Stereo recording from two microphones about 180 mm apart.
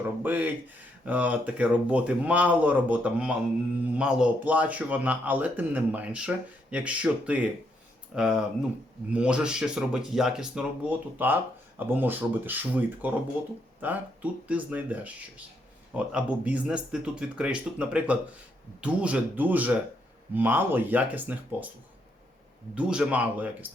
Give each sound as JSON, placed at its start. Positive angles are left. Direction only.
{"t": 0.2, "sound": "a man's voice", "side_deg": -10}
{"t": 16.1, "sound": "a man's voice", "side_deg": -10}
{"t": 22.7, "sound": "a man's voice", "side_deg": -5}